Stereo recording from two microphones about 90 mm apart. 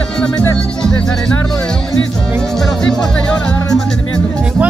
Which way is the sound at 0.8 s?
10° left (ahead or behind).